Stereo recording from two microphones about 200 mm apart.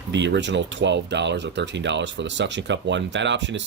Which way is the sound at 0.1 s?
60° right (ahead or behind).